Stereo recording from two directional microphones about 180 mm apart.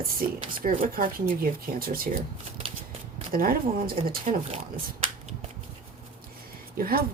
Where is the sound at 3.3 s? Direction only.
55° right (ahead or behind).